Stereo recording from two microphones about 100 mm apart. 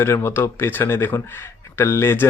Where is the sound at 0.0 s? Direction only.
25° left (ahead or behind).